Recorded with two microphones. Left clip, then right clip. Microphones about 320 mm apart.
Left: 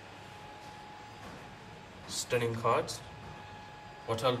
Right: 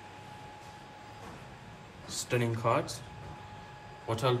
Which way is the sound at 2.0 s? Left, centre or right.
Centre.